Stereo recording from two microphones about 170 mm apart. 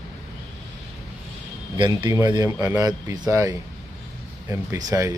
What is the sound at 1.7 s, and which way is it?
A man's voice, 20° right (ahead or behind).